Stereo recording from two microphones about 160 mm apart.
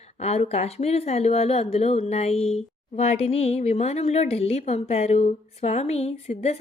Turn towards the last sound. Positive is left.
turn(degrees=40)  # may be behind; listen again after turning